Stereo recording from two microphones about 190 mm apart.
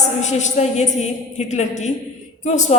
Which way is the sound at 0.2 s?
40° left (ahead or behind).